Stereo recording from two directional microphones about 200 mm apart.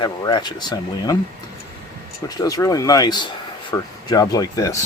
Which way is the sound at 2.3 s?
15° left (ahead or behind).